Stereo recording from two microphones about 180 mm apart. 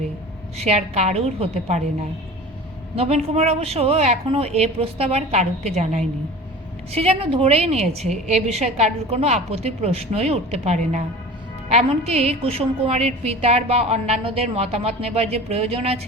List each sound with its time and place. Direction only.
0.6 s a woman's voice: 40° right (ahead or behind)
2.9 s a woman's voice: 35° right (ahead or behind)